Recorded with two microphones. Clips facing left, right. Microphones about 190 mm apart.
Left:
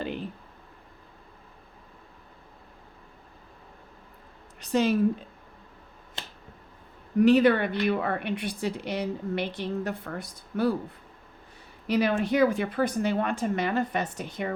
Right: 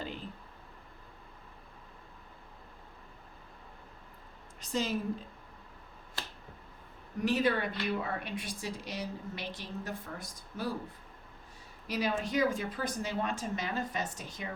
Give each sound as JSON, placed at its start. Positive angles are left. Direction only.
{"t": 0.0, "sound": "a sound", "side_deg": 65}
{"t": 4.6, "sound": "a woman's voice", "side_deg": 65}
{"t": 7.2, "sound": "a woman's voice", "side_deg": 65}
{"t": 11.9, "sound": "a woman's voice", "side_deg": 65}